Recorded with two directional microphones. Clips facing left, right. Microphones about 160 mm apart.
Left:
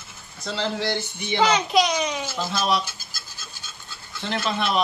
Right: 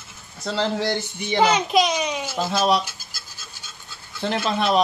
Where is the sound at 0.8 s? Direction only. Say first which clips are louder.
Right 2 dB; 40° right (ahead or behind).